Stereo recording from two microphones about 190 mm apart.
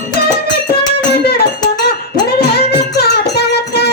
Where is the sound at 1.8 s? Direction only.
55° left (ahead or behind).